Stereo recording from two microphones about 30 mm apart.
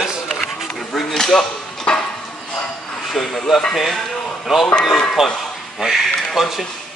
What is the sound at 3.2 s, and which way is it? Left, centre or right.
Speech, centre.